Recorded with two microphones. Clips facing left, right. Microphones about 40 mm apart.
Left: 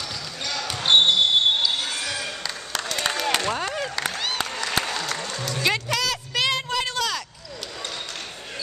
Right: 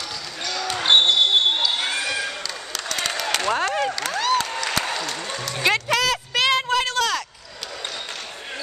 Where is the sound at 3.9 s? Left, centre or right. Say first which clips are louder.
Right 5 dB; centre.